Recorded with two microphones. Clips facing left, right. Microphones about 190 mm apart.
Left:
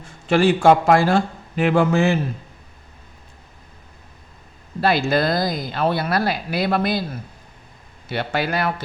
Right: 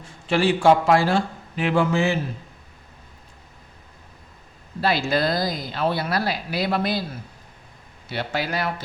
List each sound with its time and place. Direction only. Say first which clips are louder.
0.3 s speech: left 3 dB; 50° left (ahead or behind)
4.8 s speech: left 3 dB; 55° left (ahead or behind)
8.1 s speech: left 3 dB; 60° left (ahead or behind)